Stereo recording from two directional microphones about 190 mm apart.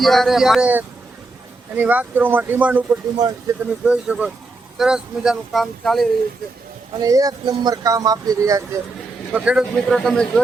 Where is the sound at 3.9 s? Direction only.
5° right (ahead or behind).